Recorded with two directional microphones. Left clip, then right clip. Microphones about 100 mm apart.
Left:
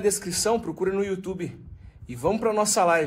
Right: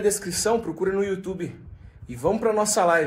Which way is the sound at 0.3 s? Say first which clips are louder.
Right 1 dB; 30° left (ahead or behind).